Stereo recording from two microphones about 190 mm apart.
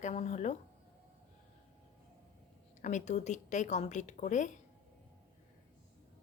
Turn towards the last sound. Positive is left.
turn(degrees=40)  # may be behind; listen again after turning